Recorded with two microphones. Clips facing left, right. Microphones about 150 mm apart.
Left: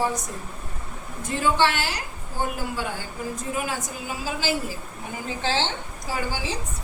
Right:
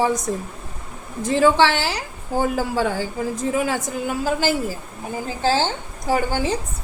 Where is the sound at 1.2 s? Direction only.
90° right; by 4.6 s 50° right (ahead or behind).